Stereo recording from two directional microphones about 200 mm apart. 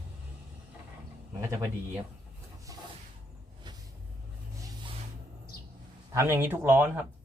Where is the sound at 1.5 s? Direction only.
15° right (ahead or behind).